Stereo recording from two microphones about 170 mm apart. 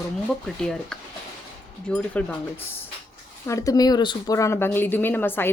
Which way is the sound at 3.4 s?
20° left (ahead or behind).